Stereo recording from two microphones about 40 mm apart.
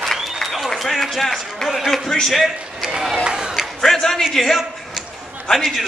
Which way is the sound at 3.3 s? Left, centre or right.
Right.